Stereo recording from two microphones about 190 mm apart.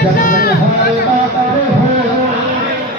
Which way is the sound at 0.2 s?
50° left (ahead or behind).